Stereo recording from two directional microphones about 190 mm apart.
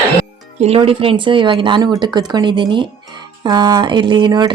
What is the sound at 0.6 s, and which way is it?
Speech, 30° right (ahead or behind).